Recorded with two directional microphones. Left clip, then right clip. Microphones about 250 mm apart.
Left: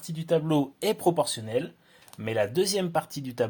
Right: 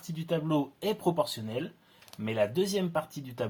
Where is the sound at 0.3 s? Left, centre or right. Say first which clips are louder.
Left 5 dB; left.